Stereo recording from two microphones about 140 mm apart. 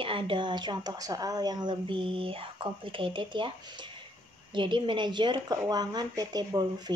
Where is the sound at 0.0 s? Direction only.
40° right (ahead or behind).